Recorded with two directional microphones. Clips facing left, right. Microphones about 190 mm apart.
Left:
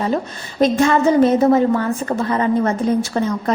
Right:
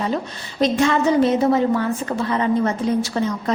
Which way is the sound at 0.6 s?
45° left (ahead or behind).